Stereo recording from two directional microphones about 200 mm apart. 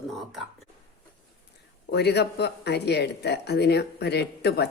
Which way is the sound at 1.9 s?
55° left (ahead or behind).